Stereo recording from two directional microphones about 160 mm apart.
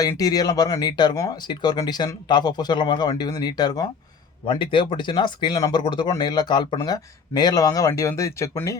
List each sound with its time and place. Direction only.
0.0 s speech: 20° left (ahead or behind)